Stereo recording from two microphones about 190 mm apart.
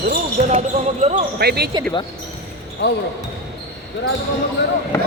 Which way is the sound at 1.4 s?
55° right (ahead or behind).